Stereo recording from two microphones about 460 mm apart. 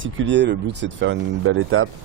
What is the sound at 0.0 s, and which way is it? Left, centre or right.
Speech, right.